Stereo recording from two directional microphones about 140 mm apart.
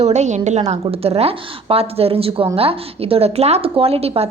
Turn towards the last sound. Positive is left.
turn(degrees=-45)  # may be behind; listen again after turning